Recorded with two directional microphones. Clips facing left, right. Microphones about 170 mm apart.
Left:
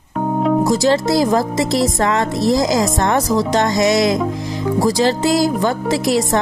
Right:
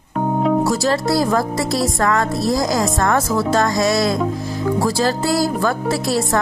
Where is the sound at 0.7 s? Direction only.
20° left (ahead or behind).